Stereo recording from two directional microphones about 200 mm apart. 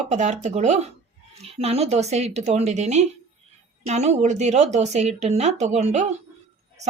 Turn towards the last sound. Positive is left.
turn(degrees=-35)  # may be behind; listen again after turning